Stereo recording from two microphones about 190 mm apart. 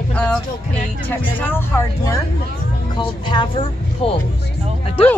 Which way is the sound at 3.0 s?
25° left (ahead or behind).